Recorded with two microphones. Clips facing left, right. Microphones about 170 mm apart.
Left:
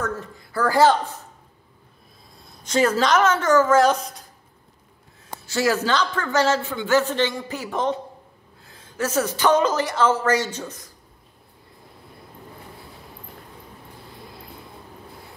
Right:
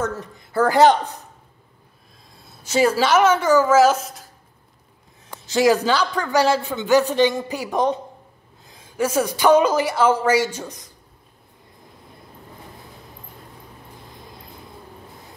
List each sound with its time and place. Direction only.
0.2 s a woman's voice: 20° right (ahead or behind)
2.3 s a woman's voice: 10° right (ahead or behind)
5.5 s speech: 15° right (ahead or behind)